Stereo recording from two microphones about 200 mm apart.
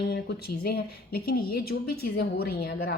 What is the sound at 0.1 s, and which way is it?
A woman's voice, 50° left (ahead or behind).